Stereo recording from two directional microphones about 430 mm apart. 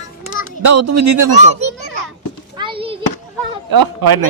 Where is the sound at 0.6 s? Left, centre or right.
Right.